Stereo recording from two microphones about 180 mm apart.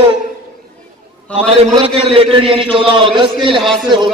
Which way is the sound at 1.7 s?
30° right (ahead or behind).